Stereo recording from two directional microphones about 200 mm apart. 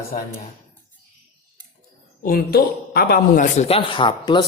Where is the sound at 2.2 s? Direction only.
50° left (ahead or behind).